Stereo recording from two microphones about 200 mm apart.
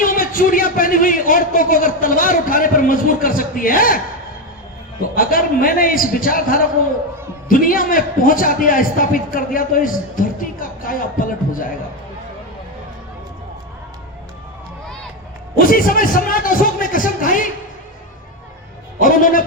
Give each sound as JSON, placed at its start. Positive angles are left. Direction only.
{"t": 0.0, "sound": "a man's voice", "side_deg": 45}
{"t": 5.1, "sound": "a man's voice", "side_deg": 45}
{"t": 15.5, "sound": "a man's voice", "side_deg": 45}
{"t": 19.0, "sound": "a man's voice", "side_deg": 45}